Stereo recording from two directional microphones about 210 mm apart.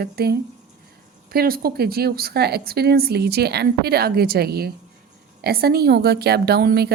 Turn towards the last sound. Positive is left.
turn(degrees=-45)  # may be behind; listen again after turning